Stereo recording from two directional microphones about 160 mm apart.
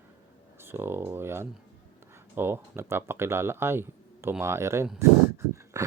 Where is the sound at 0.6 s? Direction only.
15° right (ahead or behind).